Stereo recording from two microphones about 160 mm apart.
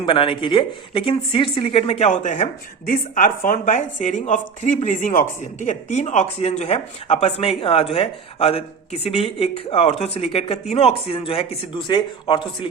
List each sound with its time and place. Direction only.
0.0 s speech: 30° left (ahead or behind)